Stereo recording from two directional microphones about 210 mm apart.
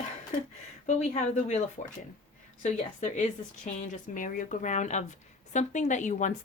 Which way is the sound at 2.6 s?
35° left (ahead or behind).